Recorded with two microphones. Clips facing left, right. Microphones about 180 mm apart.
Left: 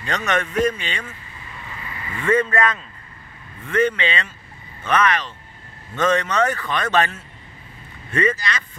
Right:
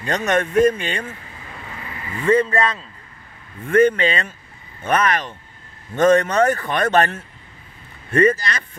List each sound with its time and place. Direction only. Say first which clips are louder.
0.2 s speech: right 5 dB; 45° right (ahead or behind)
2.1 s speech: right 2 dB; 30° right (ahead or behind)
3.6 s speech: right 5 dB; 50° right (ahead or behind)